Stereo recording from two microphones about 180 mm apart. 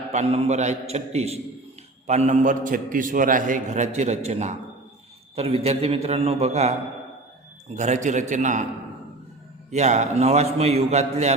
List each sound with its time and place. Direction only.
0.1 s a man's voice: 35° right (ahead or behind)
7.8 s a man's voice: 40° right (ahead or behind)
9.7 s a man's voice: 40° right (ahead or behind)